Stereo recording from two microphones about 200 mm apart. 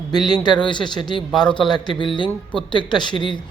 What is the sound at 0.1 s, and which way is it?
Speech, 20° left (ahead or behind).